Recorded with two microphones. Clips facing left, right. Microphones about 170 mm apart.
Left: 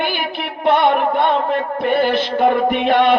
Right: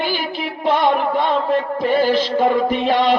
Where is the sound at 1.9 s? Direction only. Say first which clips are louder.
Even; 60° left (ahead or behind).